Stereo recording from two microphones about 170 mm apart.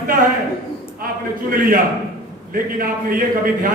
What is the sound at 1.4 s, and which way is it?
A man's voice, 55° right (ahead or behind).